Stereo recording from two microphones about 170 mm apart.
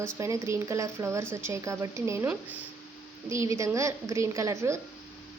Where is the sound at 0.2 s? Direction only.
15° right (ahead or behind).